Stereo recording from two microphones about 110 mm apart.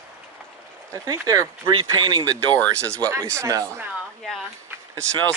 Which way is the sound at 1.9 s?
45° right (ahead or behind).